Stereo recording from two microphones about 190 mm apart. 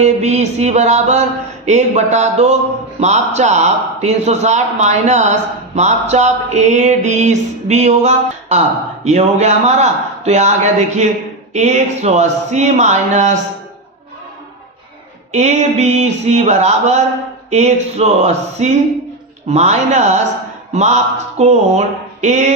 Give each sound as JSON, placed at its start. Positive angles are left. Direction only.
{"t": 0.0, "sound": "a man's voice", "side_deg": -35}
{"t": 15.3, "sound": "a man's voice", "side_deg": -35}